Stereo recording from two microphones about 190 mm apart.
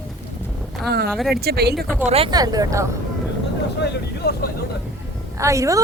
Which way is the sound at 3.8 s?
55° left (ahead or behind).